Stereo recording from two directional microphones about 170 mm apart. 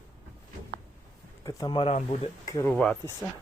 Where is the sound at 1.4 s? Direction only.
20° left (ahead or behind).